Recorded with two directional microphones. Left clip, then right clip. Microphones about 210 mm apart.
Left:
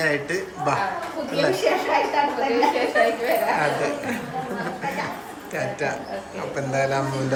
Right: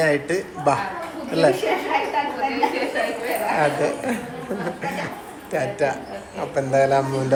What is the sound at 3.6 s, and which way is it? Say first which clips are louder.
Speech: right 2 dB; centre (ahead or behind).